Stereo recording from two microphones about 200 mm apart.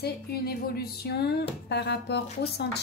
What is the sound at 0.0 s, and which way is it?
Speech, 50° left (ahead or behind).